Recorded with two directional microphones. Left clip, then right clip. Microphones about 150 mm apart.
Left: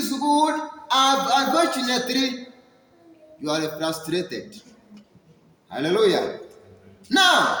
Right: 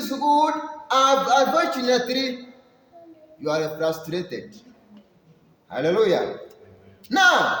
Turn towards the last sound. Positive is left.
turn(degrees=-20)  # may be behind; listen again after turning